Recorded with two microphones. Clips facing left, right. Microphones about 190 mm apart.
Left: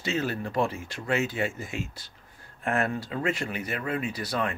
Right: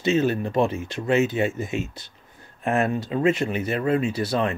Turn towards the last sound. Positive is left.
turn(degrees=-25)  # may be behind; listen again after turning